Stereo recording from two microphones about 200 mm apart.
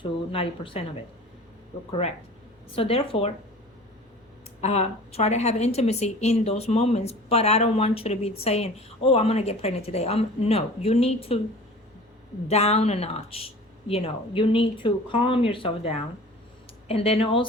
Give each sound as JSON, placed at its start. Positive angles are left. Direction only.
{"t": 0.0, "sound": "speech", "side_deg": 25}
{"t": 1.9, "sound": "a woman's voice", "side_deg": 30}
{"t": 4.6, "sound": "a woman's voice", "side_deg": 35}
{"t": 12.5, "sound": "speech", "side_deg": 30}